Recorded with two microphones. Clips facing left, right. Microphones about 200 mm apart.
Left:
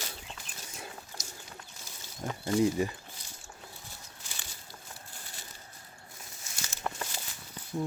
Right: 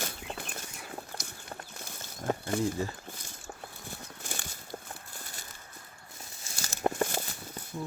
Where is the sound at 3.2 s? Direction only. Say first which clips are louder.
Right 5 dB; 50° right (ahead or behind); by 6.9 s 35° right (ahead or behind).